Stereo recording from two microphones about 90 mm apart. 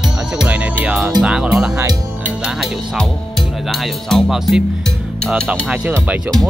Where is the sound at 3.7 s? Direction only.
Centre (ahead or behind).